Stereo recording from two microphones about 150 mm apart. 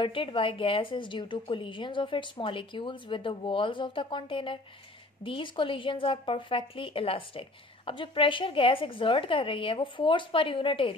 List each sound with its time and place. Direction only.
0.0 s a woman's voice: 35° left (ahead or behind)